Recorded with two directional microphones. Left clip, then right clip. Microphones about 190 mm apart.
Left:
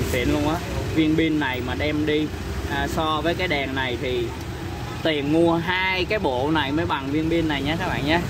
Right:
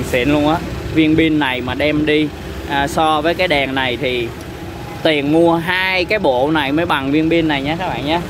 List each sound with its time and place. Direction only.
0.1 s speech: 35° right (ahead or behind); by 8.2 s 15° right (ahead or behind)